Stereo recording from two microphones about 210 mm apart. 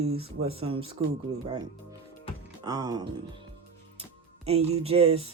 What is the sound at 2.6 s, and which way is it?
Music, 20° right (ahead or behind).